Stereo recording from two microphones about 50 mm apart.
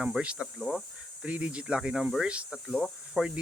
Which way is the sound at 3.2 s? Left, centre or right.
Centre.